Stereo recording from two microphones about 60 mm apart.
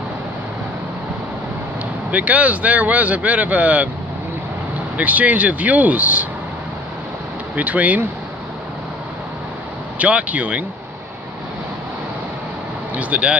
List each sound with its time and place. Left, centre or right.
2.0 s speech: right
4.9 s speech: right
7.5 s speech: right
9.9 s speech: right
12.9 s speech: right